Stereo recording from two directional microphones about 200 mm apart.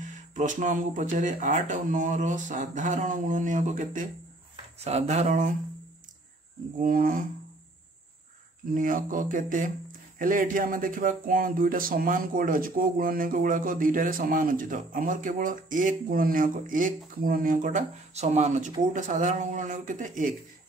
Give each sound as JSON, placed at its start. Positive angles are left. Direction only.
{"t": 0.3, "sound": "speech", "side_deg": -40}
{"t": 6.8, "sound": "speech", "side_deg": -45}
{"t": 8.7, "sound": "speech", "side_deg": -40}